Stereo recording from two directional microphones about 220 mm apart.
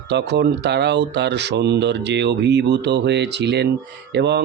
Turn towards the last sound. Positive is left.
turn(degrees=-50)  # may be behind; listen again after turning